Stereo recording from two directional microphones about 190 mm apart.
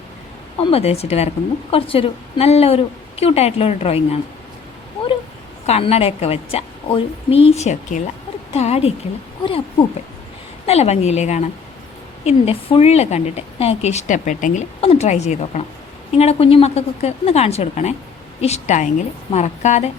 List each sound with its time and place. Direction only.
0.6 s a woman's voice: 30° left (ahead or behind)
5.6 s a woman's voice: 35° left (ahead or behind)
10.7 s a woman's voice: 35° left (ahead or behind)